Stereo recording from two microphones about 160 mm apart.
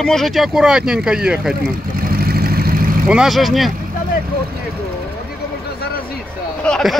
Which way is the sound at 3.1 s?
Centre (ahead or behind).